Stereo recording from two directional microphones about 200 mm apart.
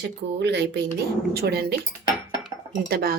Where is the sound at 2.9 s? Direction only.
50° right (ahead or behind).